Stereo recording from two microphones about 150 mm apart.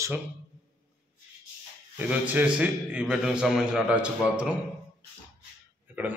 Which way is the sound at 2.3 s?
10° right (ahead or behind).